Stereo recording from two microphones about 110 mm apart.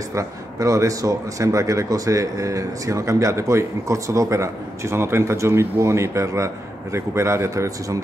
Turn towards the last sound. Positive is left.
turn(degrees=-25)  # may be behind; listen again after turning